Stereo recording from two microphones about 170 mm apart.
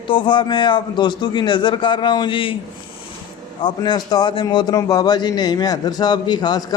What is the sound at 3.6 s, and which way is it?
A man's voice, 25° left (ahead or behind).